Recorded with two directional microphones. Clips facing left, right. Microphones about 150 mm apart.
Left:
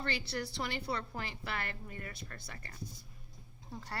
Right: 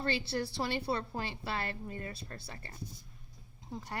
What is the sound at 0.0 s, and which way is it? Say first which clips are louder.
A woman's voice: right 4 dB; 30° right (ahead or behind).